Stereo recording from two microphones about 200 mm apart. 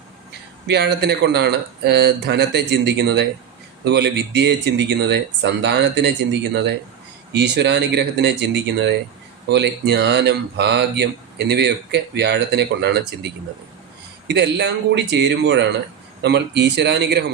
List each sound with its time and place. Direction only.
0.7 s speech: 55° right (ahead or behind)
14.3 s speech: 60° right (ahead or behind)